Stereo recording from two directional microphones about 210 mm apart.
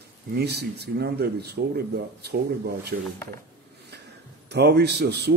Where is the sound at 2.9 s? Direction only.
45° right (ahead or behind).